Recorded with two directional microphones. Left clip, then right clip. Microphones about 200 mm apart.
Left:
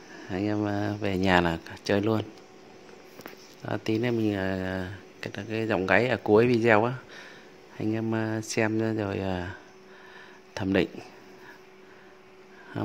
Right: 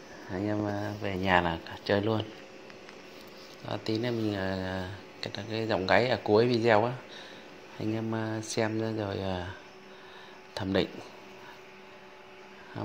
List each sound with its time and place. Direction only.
0.3 s speech: 35° left (ahead or behind)
0.8 s speech: 55° left (ahead or behind)
1.4 s speech: 35° left (ahead or behind)
3.6 s speech: 35° left (ahead or behind)